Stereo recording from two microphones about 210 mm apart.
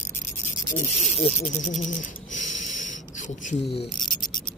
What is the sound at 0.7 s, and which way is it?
Speech, 30° left (ahead or behind).